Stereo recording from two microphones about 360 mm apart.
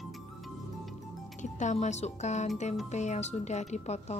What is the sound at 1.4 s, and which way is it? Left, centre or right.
Speech, centre.